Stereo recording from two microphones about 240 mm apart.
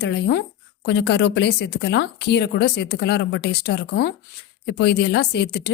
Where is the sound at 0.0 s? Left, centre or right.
Left.